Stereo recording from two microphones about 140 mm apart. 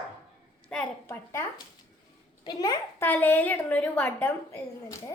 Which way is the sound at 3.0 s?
15° left (ahead or behind).